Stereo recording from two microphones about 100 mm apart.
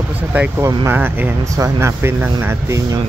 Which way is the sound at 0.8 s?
20° right (ahead or behind).